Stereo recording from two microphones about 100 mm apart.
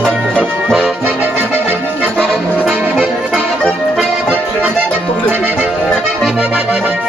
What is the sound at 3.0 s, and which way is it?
Accordion, 10° left (ahead or behind).